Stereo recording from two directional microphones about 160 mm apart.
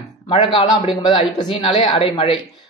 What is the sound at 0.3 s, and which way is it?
Speech, 30° left (ahead or behind).